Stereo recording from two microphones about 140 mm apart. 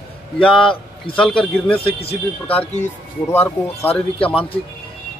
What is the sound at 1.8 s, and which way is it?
Speech, 40° left (ahead or behind).